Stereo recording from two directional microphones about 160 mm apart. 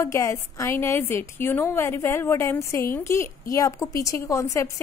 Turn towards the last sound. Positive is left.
turn(degrees=20)  # may be behind; listen again after turning